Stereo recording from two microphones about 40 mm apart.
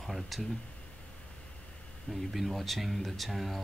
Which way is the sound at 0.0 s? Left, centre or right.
Centre.